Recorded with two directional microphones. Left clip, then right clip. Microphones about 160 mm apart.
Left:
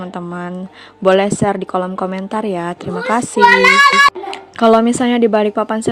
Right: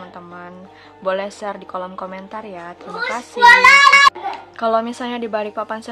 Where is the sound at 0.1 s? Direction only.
50° left (ahead or behind).